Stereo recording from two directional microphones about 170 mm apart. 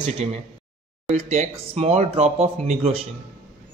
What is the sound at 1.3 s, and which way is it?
A man's voice, 40° right (ahead or behind).